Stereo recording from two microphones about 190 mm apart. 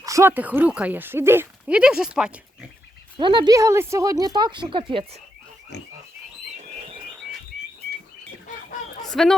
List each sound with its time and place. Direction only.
0.0 s speech: 15° right (ahead or behind)
3.2 s speech: 25° right (ahead or behind)
5.7 s pig: 60° left (ahead or behind)
6.7 s frog: 30° right (ahead or behind)
9.2 s a woman's voice: centre (ahead or behind)